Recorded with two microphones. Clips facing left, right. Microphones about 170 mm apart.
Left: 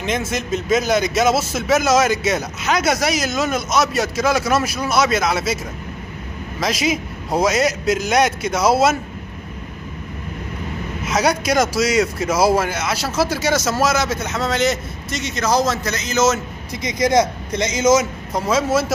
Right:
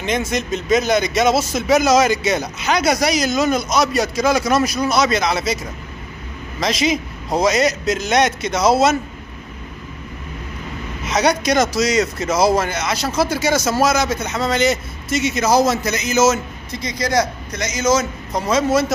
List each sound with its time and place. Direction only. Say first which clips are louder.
0.0 s speech: right 2 dB; 5° left (ahead or behind)
6.6 s a man's voice: right 2 dB; 5° left (ahead or behind)
11.1 s speech: right 1 dB; 5° left (ahead or behind)
16.7 s a man's voice: left 3 dB; 20° left (ahead or behind)
18.3 s speech: right 1 dB; 5° left (ahead or behind)